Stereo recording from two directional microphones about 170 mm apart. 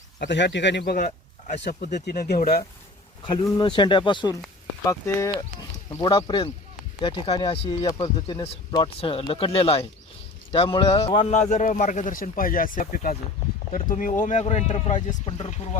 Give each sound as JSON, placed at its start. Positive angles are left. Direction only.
{"t": 0.2, "sound": "a man's voice", "side_deg": 85}
{"t": 1.6, "sound": "speech", "side_deg": 80}
{"t": 2.0, "sound": "speech", "side_deg": 70}
{"t": 3.4, "sound": "speech", "side_deg": 25}
{"t": 4.9, "sound": "speech", "side_deg": 15}
{"t": 7.8, "sound": "speech", "side_deg": 25}
{"t": 11.3, "sound": "speech", "side_deg": 45}